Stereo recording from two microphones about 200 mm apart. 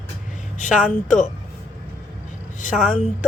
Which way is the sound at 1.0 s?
40° left (ahead or behind).